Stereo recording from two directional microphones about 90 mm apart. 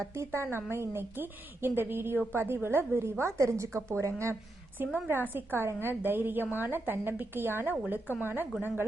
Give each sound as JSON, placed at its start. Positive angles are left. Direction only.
{"t": 0.0, "sound": "a woman's voice", "side_deg": -30}
{"t": 8.0, "sound": "speech", "side_deg": 25}
{"t": 8.6, "sound": "a woman's voice", "side_deg": -20}